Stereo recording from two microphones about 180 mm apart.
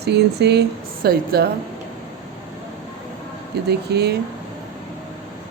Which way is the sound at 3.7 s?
65° right (ahead or behind).